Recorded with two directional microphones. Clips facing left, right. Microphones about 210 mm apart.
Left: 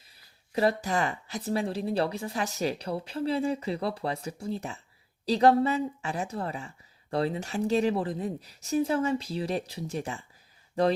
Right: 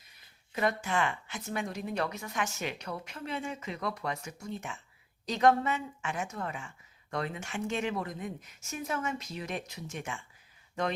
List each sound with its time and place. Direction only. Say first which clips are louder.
0.0 s speech: left 2 dB; 30° left (ahead or behind)